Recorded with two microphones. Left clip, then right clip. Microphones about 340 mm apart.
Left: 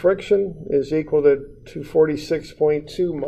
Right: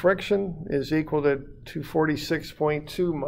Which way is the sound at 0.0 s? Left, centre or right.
Right.